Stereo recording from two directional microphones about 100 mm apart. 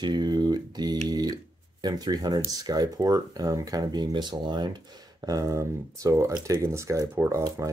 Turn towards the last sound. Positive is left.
turn(degrees=-30)  # may be behind; listen again after turning